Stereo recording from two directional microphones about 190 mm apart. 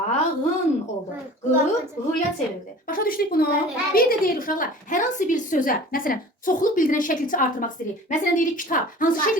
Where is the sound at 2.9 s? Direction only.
50° left (ahead or behind).